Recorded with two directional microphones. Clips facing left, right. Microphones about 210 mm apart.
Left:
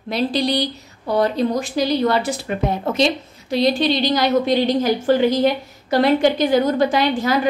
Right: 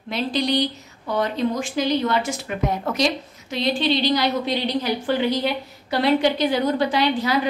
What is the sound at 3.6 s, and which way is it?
A woman's voice, 45° left (ahead or behind).